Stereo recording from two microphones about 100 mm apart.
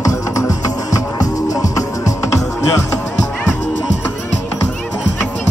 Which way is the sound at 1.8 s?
35° left (ahead or behind).